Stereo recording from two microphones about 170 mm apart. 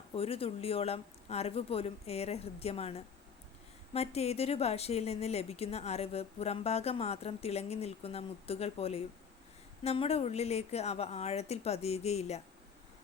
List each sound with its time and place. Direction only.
0.2 s a woman's voice: 35° left (ahead or behind)